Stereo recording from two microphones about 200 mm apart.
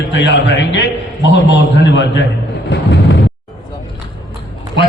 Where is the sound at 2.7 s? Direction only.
60° left (ahead or behind).